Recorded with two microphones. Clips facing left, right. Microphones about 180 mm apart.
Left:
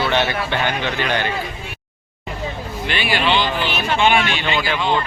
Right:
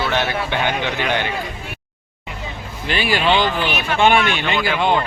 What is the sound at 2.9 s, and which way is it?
Speech, 40° right (ahead or behind).